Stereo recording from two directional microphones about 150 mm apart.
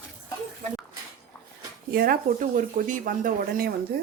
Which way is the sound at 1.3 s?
15° left (ahead or behind).